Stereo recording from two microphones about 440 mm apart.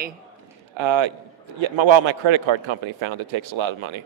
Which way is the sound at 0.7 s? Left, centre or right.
Right.